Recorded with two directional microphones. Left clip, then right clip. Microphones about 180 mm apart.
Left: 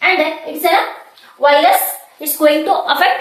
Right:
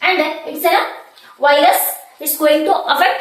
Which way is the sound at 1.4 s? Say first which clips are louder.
Left 1 dB; 20° left (ahead or behind).